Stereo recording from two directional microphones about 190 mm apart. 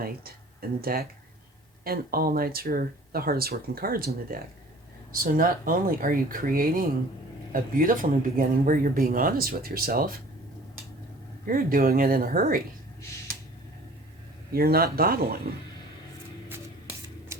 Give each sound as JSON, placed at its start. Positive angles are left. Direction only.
{"t": 0.8, "sound": "speech", "side_deg": -50}
{"t": 11.4, "sound": "speech", "side_deg": -45}
{"t": 14.5, "sound": "speech", "side_deg": -55}